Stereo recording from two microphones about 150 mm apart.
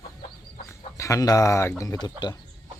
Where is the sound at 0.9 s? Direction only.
20° left (ahead or behind).